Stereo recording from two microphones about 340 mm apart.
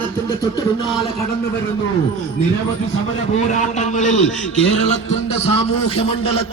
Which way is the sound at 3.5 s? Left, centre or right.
Left.